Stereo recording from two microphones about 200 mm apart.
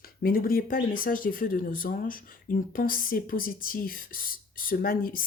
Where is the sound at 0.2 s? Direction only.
45° left (ahead or behind).